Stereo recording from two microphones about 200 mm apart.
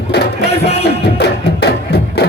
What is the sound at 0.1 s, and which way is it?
Music, 55° left (ahead or behind).